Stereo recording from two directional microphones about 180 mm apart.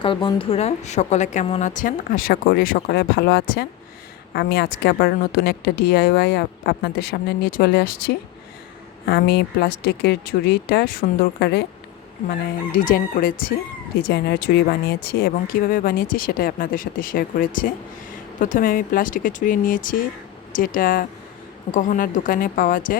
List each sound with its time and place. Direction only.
0.0 s a woman's voice: 25° left (ahead or behind); by 11.6 s 65° left (ahead or behind)
12.7 s a woman's voice: 50° left (ahead or behind)
14.1 s a woman's voice: 60° left (ahead or behind)